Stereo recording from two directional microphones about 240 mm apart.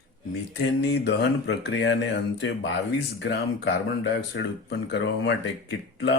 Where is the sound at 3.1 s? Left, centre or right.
Left.